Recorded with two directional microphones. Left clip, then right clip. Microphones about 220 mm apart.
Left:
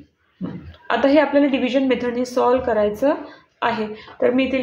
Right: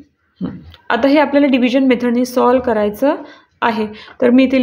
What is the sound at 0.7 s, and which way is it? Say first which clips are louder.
A woman's voice: right 3 dB; 35° right (ahead or behind).